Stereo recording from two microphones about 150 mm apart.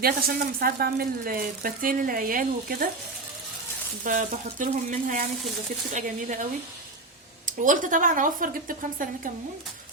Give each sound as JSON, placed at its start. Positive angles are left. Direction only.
{"t": 0.0, "sound": "speech", "side_deg": -90}
{"t": 4.0, "sound": "speech", "side_deg": -55}
{"t": 7.4, "sound": "speech", "side_deg": -60}